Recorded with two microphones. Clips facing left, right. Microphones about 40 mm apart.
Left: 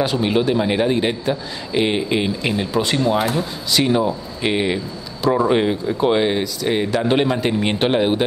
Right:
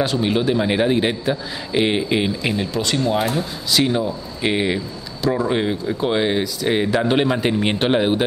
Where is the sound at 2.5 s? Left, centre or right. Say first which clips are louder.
Left 2 dB; centre.